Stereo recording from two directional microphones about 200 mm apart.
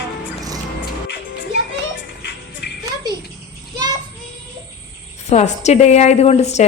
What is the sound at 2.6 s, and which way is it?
Music, 55° left (ahead or behind).